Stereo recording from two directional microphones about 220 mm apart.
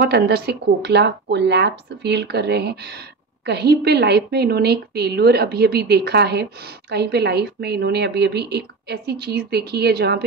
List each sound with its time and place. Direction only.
0.0 s a woman's voice: 45° right (ahead or behind)